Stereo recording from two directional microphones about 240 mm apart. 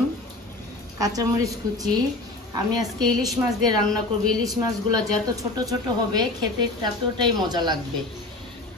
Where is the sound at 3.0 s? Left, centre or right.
Centre.